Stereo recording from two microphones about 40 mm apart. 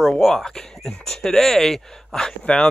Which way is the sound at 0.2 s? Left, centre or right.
Centre.